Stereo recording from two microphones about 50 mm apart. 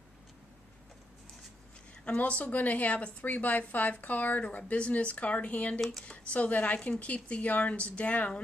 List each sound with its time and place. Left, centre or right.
2.0 s speech: left